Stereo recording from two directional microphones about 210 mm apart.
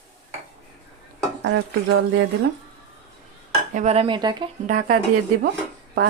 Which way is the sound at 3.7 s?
30° right (ahead or behind).